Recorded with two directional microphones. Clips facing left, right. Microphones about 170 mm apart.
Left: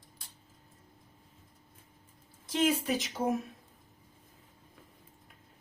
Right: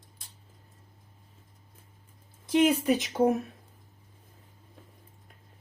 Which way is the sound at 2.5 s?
60° right (ahead or behind).